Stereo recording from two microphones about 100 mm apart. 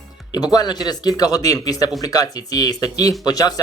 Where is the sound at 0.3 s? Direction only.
40° left (ahead or behind).